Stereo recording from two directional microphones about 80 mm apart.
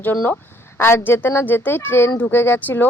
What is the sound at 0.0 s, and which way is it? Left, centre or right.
Speech, left.